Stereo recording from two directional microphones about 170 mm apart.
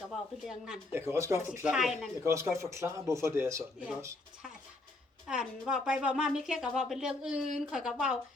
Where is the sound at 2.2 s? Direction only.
15° right (ahead or behind).